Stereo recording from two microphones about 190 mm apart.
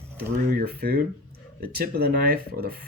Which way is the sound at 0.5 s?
55° right (ahead or behind).